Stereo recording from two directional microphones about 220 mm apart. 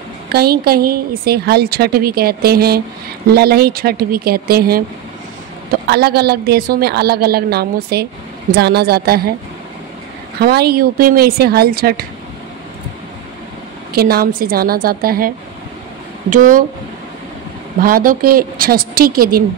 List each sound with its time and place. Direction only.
0.3 s a woman's voice: 45° right (ahead or behind)
10.4 s a woman's voice: 45° right (ahead or behind)
13.9 s a woman's voice: 45° right (ahead or behind)
17.8 s a woman's voice: 40° right (ahead or behind)